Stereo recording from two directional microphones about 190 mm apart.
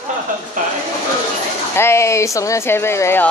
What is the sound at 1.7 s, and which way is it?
Speech, 15° left (ahead or behind).